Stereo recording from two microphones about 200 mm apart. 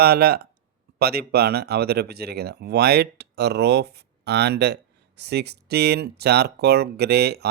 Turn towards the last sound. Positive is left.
turn(degrees=-55)  # may be behind; listen again after turning